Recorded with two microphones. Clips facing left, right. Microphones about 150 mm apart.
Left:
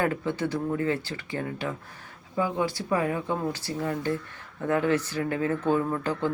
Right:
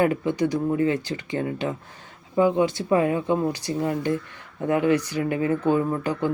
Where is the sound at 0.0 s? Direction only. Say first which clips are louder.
Right 5 dB; 15° right (ahead or behind).